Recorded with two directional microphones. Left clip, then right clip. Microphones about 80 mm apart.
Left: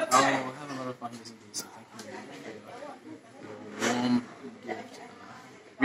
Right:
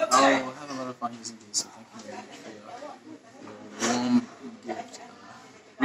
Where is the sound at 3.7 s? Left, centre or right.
Right.